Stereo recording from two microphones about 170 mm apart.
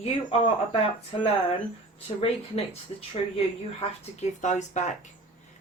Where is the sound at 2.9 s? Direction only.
35° left (ahead or behind).